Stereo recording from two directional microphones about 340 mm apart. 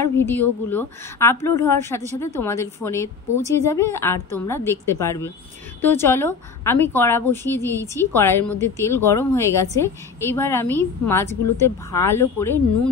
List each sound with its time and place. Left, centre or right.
0.3 s a woman's voice: centre